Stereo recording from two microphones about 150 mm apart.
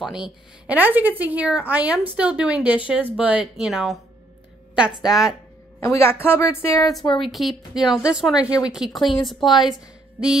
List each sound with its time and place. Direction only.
0.0 s speech: 5° right (ahead or behind)
5.0 s speech: 5° right (ahead or behind)
5.8 s a woman's voice: 15° left (ahead or behind)
7.2 s speech: centre (ahead or behind)